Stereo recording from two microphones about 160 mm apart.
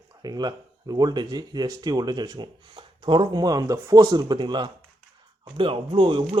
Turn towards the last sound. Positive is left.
turn(degrees=-30)  # may be behind; listen again after turning